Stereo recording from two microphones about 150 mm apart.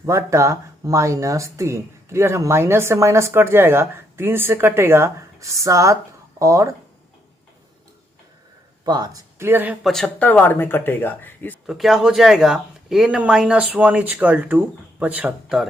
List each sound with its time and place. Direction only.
0.0 s speech: 20° right (ahead or behind)
8.8 s speech: 25° right (ahead or behind)
9.8 s speech: centre (ahead or behind)
11.6 s speech: 5° right (ahead or behind)